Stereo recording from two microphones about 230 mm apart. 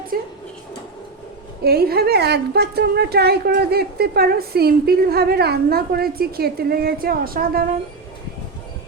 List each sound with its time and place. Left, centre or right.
0.1 s speech: right
1.6 s a woman's voice: right